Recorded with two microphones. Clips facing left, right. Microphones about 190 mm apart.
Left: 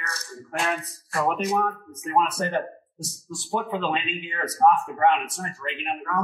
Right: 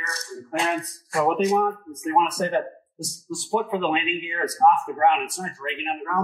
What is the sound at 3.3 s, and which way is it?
Speech, centre (ahead or behind).